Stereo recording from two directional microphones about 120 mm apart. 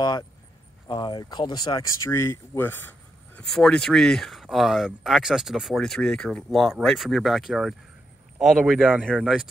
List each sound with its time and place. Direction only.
0.8 s speech: 40° left (ahead or behind)
2.0 s speech: 20° left (ahead or behind)
3.5 s speech: 5° left (ahead or behind)